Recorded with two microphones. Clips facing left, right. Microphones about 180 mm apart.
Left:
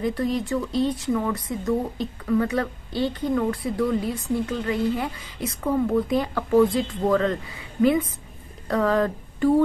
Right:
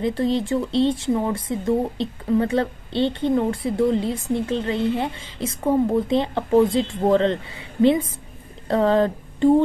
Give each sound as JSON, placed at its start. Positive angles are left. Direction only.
{"t": 0.0, "sound": "speech", "side_deg": -25}